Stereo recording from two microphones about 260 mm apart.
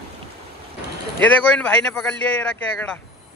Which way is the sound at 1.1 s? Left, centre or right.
Centre.